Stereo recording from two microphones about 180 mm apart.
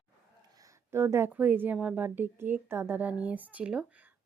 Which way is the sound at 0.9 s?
15° right (ahead or behind).